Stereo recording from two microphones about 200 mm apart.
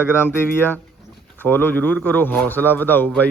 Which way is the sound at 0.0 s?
10° left (ahead or behind).